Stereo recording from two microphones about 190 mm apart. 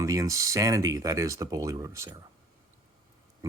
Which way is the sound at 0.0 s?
15° right (ahead or behind).